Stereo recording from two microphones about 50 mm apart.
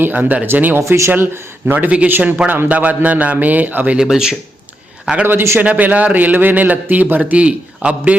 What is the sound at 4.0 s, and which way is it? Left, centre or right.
Speech, centre.